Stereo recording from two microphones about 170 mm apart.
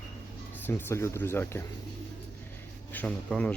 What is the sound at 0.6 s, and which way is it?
Speech, 15° left (ahead or behind).